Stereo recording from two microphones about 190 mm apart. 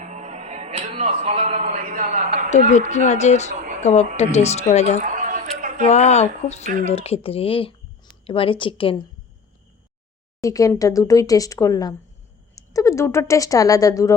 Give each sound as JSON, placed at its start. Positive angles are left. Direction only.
{"t": 0.0, "sound": "music", "side_deg": -35}
{"t": 2.5, "sound": "speech", "side_deg": 40}
{"t": 3.5, "sound": "a sound", "side_deg": -45}
{"t": 4.2, "sound": "speech", "side_deg": 35}
{"t": 5.0, "sound": "a sound", "side_deg": -45}
{"t": 5.8, "sound": "a woman's voice", "side_deg": 35}
{"t": 10.4, "sound": "speech", "side_deg": 15}